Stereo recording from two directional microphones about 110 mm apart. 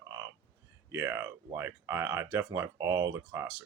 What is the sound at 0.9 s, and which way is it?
Speech, 25° right (ahead or behind).